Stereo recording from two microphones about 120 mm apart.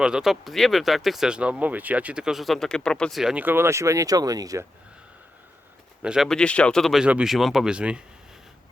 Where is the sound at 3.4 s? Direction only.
20° right (ahead or behind).